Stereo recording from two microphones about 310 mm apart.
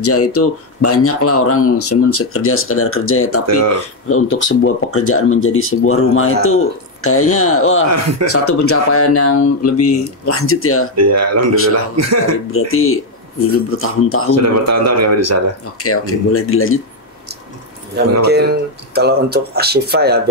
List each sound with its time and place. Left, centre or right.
0.0 s speech: left
3.4 s a man's voice: right
4.1 s speech: left
11.0 s a man's voice: right
12.4 s speech: left
14.3 s a man's voice: right
15.8 s speech: left
18.2 s speech: right